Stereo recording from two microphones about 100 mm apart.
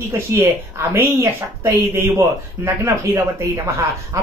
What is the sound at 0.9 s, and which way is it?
Speech, 30° right (ahead or behind).